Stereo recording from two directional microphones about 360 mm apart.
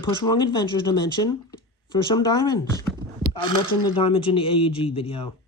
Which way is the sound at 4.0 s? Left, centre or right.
Centre.